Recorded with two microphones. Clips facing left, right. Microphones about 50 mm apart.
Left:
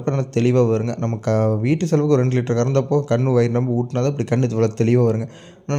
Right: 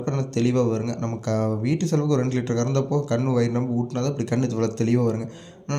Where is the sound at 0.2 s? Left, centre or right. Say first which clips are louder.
Left 4 dB; left.